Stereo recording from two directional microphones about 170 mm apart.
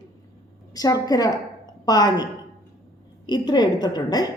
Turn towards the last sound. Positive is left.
turn(degrees=25)  # may be behind; listen again after turning